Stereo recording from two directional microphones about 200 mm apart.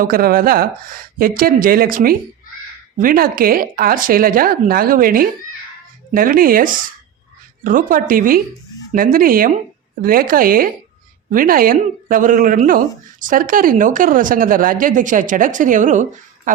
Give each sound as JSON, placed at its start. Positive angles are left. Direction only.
{"t": 0.0, "sound": "speech", "side_deg": -45}